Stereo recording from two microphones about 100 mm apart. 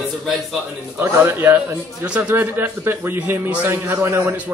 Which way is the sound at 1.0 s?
25° right (ahead or behind).